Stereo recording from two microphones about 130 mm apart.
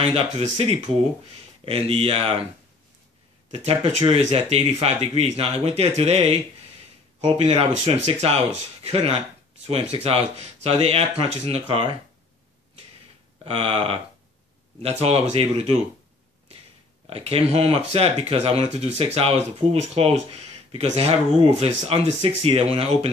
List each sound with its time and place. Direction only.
0.0 s speech: 50° right (ahead or behind)
3.5 s speech: 55° right (ahead or behind)
7.5 s speech: 55° right (ahead or behind)
13.4 s speech: 45° right (ahead or behind)
17.1 s speech: 50° right (ahead or behind)